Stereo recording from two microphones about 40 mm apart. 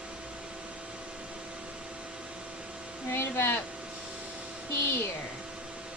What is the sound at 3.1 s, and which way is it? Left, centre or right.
Speech, left.